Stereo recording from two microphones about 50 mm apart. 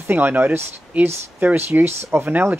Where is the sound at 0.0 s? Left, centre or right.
Right.